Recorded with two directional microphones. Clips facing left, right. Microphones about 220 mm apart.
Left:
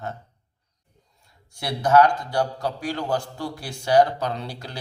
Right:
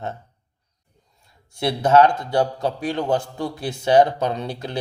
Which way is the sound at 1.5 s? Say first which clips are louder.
Right 2 dB; 25° right (ahead or behind).